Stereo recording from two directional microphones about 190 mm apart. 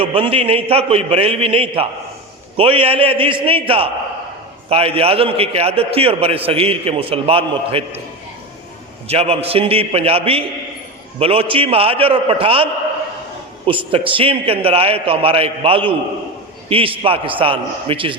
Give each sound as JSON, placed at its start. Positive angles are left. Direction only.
{"t": 0.0, "sound": "a man's voice", "side_deg": -30}
{"t": 9.0, "sound": "a man's voice", "side_deg": -30}
{"t": 13.7, "sound": "a man's voice", "side_deg": -25}